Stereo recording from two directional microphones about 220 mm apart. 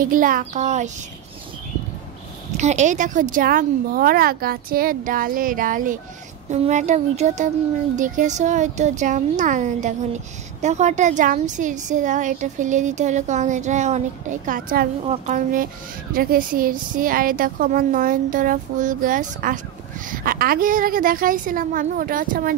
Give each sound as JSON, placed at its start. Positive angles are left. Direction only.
{"t": 0.0, "sound": "speech", "side_deg": -40}
{"t": 2.5, "sound": "speech", "side_deg": -30}